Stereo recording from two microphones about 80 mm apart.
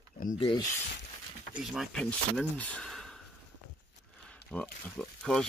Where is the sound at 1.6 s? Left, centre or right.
Centre.